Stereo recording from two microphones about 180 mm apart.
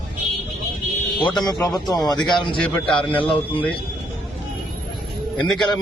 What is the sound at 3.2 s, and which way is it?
Speech, 30° left (ahead or behind).